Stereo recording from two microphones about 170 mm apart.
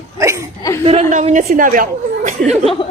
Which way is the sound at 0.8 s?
40° right (ahead or behind).